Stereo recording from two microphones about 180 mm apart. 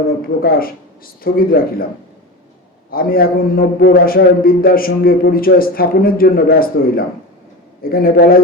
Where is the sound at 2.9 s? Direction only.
55° left (ahead or behind).